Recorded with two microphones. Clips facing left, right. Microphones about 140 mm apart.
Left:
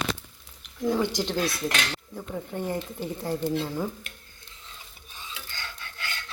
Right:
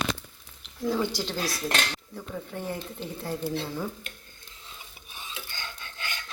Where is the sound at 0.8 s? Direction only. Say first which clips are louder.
Left 2 dB; 20° left (ahead or behind).